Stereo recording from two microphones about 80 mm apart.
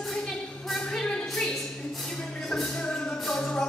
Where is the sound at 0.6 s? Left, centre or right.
Centre.